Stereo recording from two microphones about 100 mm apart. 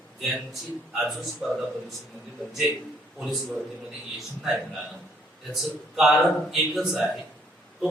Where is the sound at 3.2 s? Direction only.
Centre (ahead or behind).